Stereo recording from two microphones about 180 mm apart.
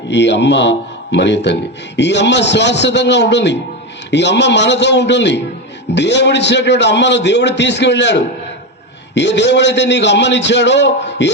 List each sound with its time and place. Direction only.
0.1 s a man's voice: 75° left (ahead or behind)